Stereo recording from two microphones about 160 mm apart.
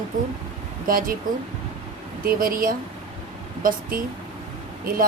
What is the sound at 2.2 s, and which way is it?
Speech, 60° right (ahead or behind).